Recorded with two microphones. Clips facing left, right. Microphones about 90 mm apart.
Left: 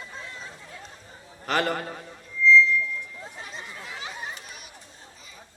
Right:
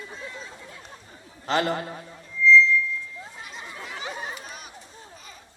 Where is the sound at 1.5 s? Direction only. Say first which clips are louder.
Right 1 dB; 25° right (ahead or behind).